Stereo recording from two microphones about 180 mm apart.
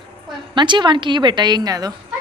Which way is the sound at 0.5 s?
25° right (ahead or behind).